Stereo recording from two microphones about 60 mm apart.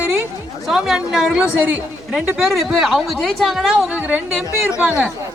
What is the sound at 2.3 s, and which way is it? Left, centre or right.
Speech, centre.